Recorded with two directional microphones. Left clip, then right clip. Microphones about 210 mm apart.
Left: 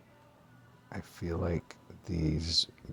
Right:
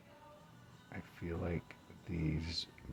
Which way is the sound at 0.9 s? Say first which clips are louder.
Left 7 dB; 25° left (ahead or behind).